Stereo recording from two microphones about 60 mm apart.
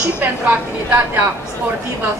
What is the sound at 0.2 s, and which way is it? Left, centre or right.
A woman's voice, right.